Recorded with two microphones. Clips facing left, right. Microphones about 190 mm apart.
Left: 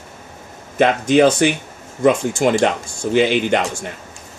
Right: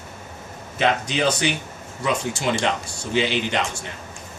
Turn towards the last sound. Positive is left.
turn(degrees=50)  # may be behind; listen again after turning